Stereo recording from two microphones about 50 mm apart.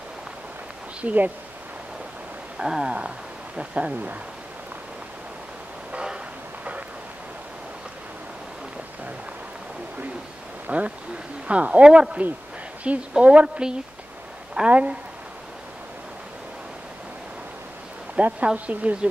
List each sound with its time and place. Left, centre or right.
1.0 s speech: right
2.5 s speech: centre
5.9 s a sound: right
10.7 s speech: right
18.1 s speech: right